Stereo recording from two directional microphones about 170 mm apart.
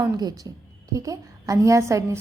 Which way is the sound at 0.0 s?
25° right (ahead or behind).